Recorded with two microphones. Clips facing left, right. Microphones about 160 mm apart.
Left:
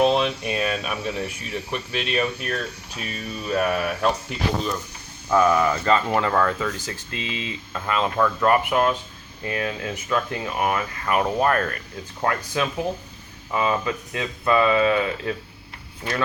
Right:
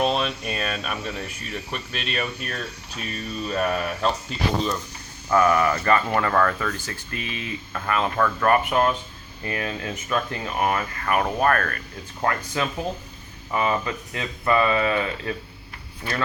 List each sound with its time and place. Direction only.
0.0 s speech: 15° left (ahead or behind)